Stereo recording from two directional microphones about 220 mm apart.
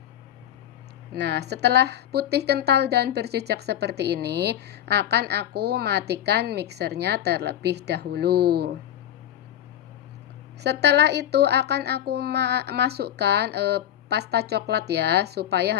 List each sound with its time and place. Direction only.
1.1 s a woman's voice: 50° right (ahead or behind)
10.6 s a woman's voice: 50° right (ahead or behind)